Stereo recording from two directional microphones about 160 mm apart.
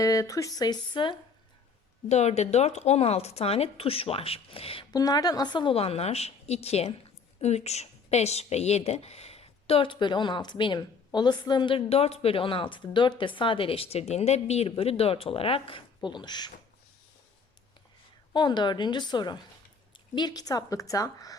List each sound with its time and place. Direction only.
0.0 s a woman's voice: 20° left (ahead or behind)
2.0 s a woman's voice: 45° left (ahead or behind)
4.9 s a woman's voice: 25° left (ahead or behind)
18.3 s a woman's voice: 25° left (ahead or behind)